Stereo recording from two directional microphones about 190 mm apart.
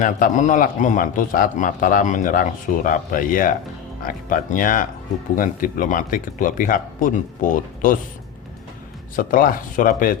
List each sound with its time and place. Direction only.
0.0 s speech: 40° left (ahead or behind)
9.1 s speech: 45° left (ahead or behind)